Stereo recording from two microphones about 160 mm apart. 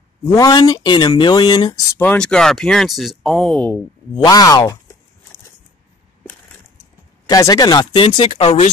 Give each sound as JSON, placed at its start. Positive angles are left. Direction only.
{"t": 0.4, "sound": "speech", "side_deg": 25}
{"t": 2.0, "sound": "speech", "side_deg": 10}
{"t": 4.2, "sound": "speech", "side_deg": 25}
{"t": 7.2, "sound": "speech", "side_deg": 25}